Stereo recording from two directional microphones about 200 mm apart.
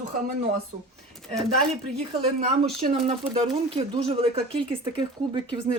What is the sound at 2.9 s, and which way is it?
A woman's voice, 30° right (ahead or behind).